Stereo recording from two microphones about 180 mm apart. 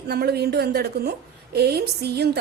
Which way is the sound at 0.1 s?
65° right (ahead or behind).